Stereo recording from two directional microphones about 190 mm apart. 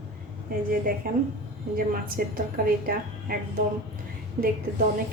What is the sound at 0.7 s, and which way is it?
A woman's voice, 50° right (ahead or behind).